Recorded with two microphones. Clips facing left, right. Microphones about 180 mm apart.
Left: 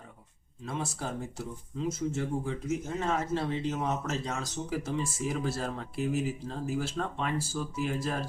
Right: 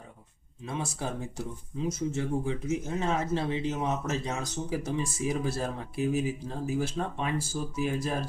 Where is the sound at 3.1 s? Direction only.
15° right (ahead or behind).